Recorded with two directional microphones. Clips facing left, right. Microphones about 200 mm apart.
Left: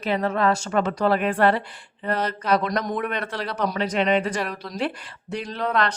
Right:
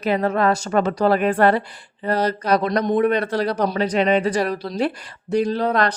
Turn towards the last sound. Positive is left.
turn(degrees=-35)  # may be behind; listen again after turning